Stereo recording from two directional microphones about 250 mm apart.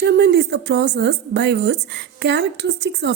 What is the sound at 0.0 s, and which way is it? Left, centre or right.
Speech, right.